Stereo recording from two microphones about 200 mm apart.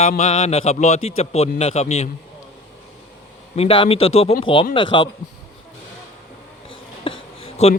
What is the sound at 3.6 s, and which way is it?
Speech, 30° left (ahead or behind).